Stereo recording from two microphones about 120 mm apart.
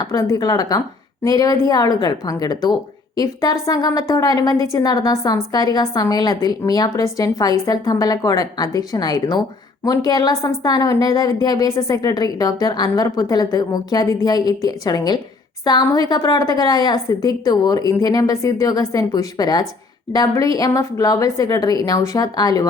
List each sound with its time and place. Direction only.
0.0 s a woman's voice: 30° left (ahead or behind)